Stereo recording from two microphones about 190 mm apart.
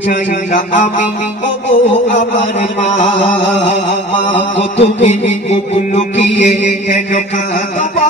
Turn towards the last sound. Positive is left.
turn(degrees=40)  # may be behind; listen again after turning